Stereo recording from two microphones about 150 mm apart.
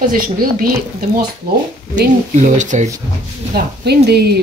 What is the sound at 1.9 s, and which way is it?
A woman's voice, 55° right (ahead or behind).